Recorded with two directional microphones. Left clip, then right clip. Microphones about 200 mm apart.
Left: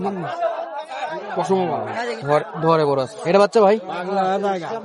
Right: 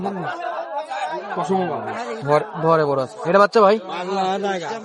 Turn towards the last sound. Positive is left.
turn(degrees=60)  # may be behind; listen again after turning